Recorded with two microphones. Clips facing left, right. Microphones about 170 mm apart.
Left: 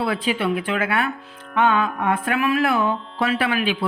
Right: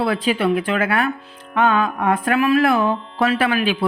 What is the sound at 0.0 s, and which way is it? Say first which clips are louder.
Speech: right 3 dB; 40° right (ahead or behind).